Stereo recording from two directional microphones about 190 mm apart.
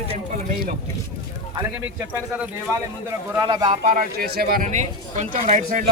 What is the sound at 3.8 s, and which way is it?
Speech, 50° right (ahead or behind).